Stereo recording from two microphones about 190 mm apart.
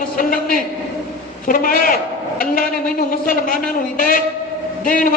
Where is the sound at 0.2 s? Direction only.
45° left (ahead or behind).